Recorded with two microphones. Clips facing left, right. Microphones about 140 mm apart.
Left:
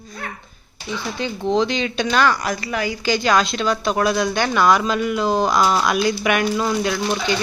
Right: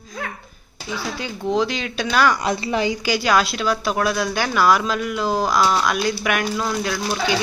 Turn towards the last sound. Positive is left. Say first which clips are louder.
# left 2 dB
turn(degrees=-5)  # may be behind; listen again after turning